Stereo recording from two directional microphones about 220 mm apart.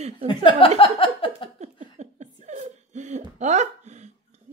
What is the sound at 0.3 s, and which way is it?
Speech, 20° left (ahead or behind).